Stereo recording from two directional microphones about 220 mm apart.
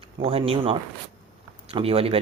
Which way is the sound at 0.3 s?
25° right (ahead or behind).